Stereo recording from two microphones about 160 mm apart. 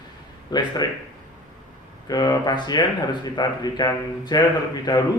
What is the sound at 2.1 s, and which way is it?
A man's voice, 25° left (ahead or behind).